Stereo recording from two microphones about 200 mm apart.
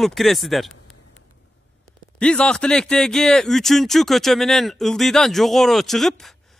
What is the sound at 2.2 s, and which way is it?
Speech, 5° left (ahead or behind).